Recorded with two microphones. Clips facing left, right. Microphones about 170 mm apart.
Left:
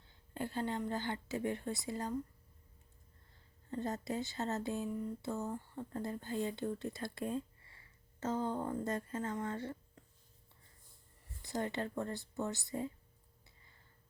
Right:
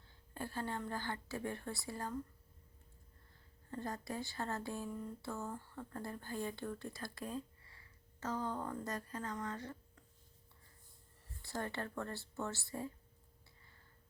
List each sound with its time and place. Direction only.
0.3 s speech: 20° left (ahead or behind)
3.7 s speech: 20° left (ahead or behind)
11.4 s speech: 20° left (ahead or behind)